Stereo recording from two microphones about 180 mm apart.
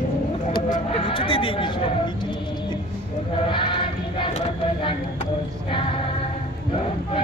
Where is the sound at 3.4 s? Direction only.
25° left (ahead or behind).